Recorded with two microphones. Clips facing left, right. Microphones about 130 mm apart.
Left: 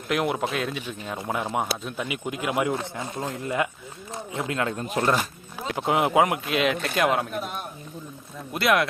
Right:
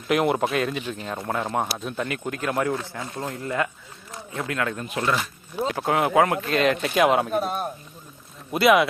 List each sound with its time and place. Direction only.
0.1 s speech: centre (ahead or behind); by 4.9 s 25° left (ahead or behind)
4.9 s speech: 40° left (ahead or behind)
5.7 s speech: 15° left (ahead or behind); by 7.3 s centre (ahead or behind)
7.3 s speech: 40° right (ahead or behind)
8.5 s speech: centre (ahead or behind)